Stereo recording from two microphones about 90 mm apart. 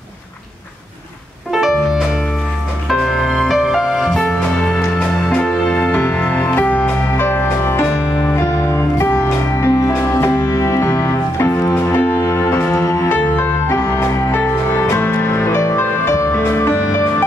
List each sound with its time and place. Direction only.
1.5 s music: 5° right (ahead or behind); by 17.0 s 30° left (ahead or behind)